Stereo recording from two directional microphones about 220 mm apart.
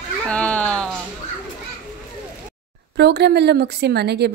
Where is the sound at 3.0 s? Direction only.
50° right (ahead or behind).